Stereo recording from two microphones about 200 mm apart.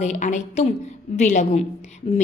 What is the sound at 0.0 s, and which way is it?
A woman's voice, 35° left (ahead or behind).